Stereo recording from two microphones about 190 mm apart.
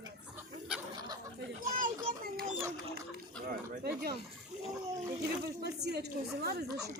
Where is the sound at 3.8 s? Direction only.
55° right (ahead or behind).